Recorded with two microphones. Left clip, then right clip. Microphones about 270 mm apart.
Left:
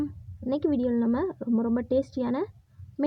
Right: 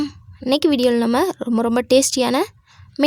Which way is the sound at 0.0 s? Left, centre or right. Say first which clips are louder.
Right 8 dB; right.